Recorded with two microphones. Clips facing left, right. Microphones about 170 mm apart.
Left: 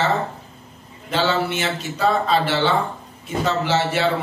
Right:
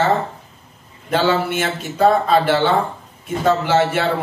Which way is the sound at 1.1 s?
50° right (ahead or behind).